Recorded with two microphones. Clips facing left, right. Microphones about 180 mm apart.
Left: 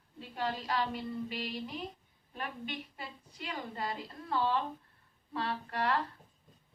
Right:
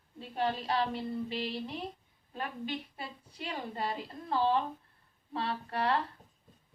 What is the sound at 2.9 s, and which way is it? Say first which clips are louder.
A woman's voice: right 3 dB; 30° right (ahead or behind).